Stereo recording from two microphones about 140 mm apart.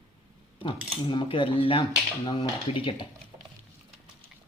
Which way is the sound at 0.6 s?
35° left (ahead or behind).